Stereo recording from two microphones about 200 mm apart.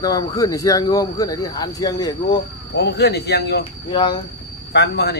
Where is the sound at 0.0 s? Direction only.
20° left (ahead or behind).